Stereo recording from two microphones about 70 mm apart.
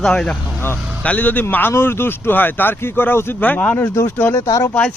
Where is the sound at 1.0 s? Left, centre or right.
Left.